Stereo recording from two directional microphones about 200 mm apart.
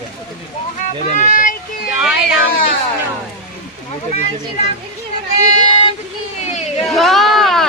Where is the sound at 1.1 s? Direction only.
40° left (ahead or behind).